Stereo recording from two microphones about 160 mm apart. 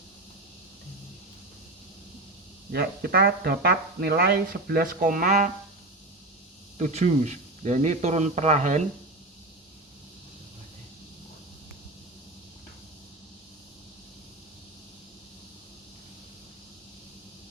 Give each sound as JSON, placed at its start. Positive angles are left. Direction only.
{"t": 2.7, "sound": "speech", "side_deg": -75}
{"t": 4.7, "sound": "speech", "side_deg": -65}
{"t": 6.7, "sound": "speech", "side_deg": -50}